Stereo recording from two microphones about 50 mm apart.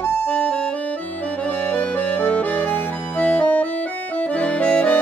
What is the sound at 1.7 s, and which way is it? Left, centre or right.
Music, left.